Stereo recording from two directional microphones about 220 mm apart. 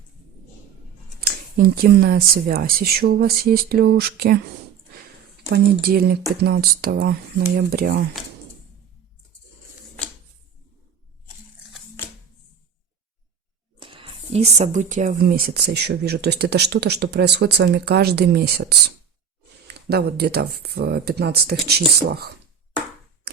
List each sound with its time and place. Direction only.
1.2 s speech: 40° right (ahead or behind)
5.5 s speech: 45° right (ahead or behind)
13.7 s speech: 20° right (ahead or behind); by 22.3 s 45° right (ahead or behind)